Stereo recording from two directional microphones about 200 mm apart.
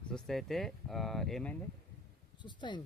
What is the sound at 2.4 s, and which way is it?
Speech, 20° left (ahead or behind).